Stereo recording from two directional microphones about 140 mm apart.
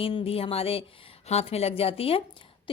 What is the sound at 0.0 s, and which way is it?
Speech, 40° left (ahead or behind).